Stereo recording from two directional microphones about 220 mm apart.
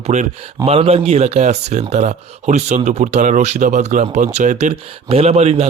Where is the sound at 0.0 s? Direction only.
30° right (ahead or behind).